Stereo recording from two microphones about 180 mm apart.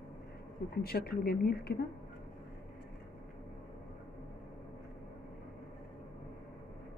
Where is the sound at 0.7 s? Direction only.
60° left (ahead or behind).